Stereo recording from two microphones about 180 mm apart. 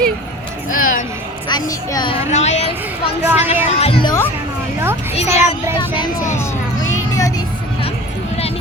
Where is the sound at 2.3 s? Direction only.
40° left (ahead or behind).